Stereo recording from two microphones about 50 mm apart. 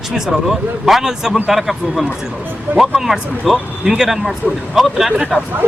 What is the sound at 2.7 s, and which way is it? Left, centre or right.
Speech, right.